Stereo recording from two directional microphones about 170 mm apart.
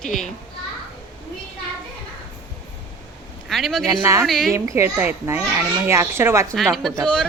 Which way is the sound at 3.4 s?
Centre (ahead or behind).